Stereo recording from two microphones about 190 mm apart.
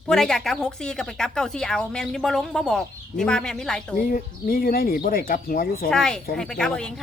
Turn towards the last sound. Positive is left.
turn(degrees=5)  # may be behind; listen again after turning